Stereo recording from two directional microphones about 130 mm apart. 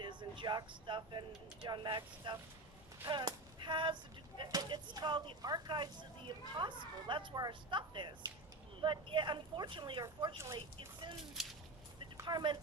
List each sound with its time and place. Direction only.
0.0 s speech: 35° right (ahead or behind)
3.1 s a sound: 35° right (ahead or behind)
4.4 s speech: 35° right (ahead or behind)
10.3 s speech: 20° right (ahead or behind)
11.4 s speech: centre (ahead or behind)
12.1 s a sound: 35° right (ahead or behind)